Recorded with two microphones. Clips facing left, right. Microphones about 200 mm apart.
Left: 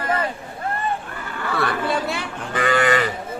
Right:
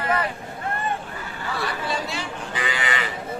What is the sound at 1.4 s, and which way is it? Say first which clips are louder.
Speech: left 6 dB; 60° left (ahead or behind).